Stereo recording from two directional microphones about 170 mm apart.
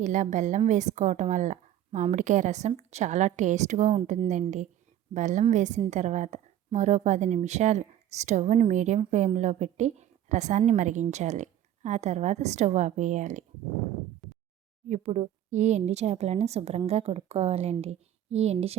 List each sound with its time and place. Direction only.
0.0 s a woman's voice: 45° right (ahead or behind)
14.8 s speech: 40° right (ahead or behind)